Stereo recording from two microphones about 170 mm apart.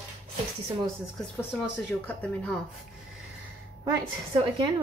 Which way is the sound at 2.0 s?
10° left (ahead or behind).